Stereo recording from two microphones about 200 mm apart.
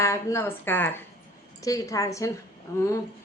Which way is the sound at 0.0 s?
15° left (ahead or behind).